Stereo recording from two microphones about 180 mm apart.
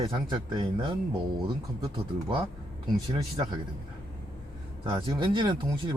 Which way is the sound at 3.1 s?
30° right (ahead or behind).